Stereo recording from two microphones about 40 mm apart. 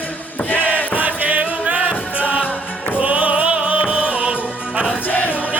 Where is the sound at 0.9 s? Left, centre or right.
Right.